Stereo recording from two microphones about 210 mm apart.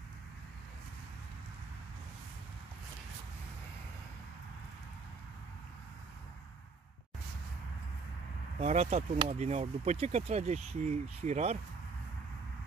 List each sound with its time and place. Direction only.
8.5 s speech: 30° right (ahead or behind)